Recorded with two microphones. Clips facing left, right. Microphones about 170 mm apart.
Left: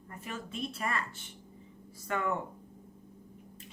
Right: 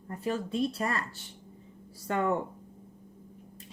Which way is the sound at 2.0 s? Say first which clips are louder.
Right 4 dB; 35° right (ahead or behind).